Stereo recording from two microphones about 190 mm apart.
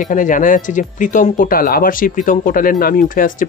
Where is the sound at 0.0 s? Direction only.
45° left (ahead or behind).